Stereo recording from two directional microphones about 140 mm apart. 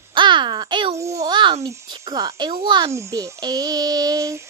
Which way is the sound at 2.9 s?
20° right (ahead or behind).